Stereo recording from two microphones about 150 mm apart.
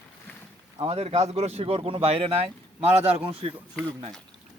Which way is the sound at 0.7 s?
40° right (ahead or behind).